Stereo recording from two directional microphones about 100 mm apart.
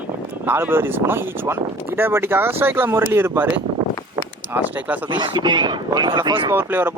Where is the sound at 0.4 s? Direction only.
20° right (ahead or behind).